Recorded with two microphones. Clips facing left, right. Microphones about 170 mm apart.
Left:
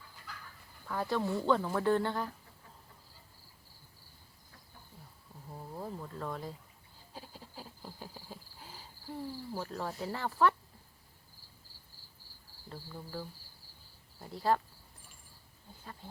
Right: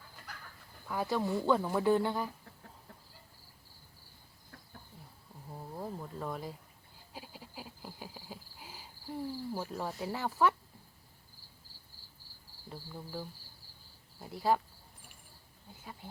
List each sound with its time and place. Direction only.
0.9 s speech: 10° right (ahead or behind)
5.5 s a sound: 5° right (ahead or behind)
7.1 s cricket: 5° right (ahead or behind)
9.6 s speech: 10° right (ahead or behind)
12.6 s cricket: 10° right (ahead or behind)
14.2 s speech: 5° right (ahead or behind)